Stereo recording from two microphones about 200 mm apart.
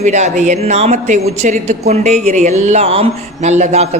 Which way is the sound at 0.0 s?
35° right (ahead or behind).